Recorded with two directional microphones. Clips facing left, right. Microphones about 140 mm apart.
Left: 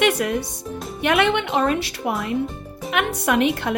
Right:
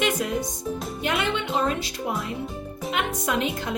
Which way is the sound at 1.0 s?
70° left (ahead or behind).